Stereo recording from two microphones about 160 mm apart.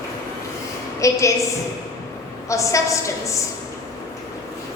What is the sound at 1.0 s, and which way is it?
Speech, 20° left (ahead or behind).